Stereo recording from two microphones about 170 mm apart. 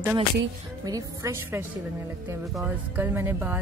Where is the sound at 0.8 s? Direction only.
20° right (ahead or behind).